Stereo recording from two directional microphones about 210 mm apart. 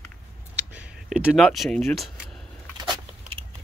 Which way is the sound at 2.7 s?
20° right (ahead or behind).